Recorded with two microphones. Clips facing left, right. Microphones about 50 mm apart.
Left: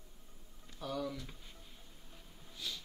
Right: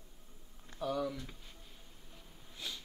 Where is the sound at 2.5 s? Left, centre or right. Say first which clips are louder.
Even; right.